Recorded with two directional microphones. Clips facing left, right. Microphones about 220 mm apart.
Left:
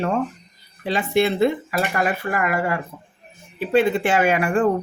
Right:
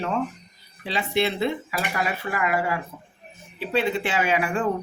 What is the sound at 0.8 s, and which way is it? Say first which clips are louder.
Speech: left 5 dB; 50° left (ahead or behind).